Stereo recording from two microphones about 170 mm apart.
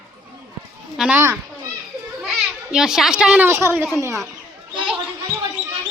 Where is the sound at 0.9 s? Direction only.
5° right (ahead or behind).